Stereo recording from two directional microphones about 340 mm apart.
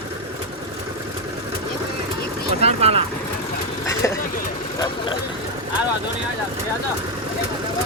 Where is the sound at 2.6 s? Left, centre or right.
Centre.